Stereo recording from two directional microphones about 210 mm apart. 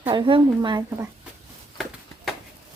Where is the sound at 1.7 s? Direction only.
Centre (ahead or behind).